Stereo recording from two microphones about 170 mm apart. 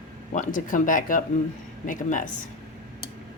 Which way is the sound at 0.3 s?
50° left (ahead or behind).